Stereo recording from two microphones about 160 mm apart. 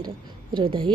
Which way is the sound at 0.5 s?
30° right (ahead or behind).